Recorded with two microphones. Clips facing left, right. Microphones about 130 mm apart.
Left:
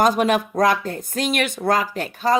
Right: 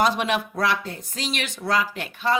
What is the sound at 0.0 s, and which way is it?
Speech, 45° left (ahead or behind).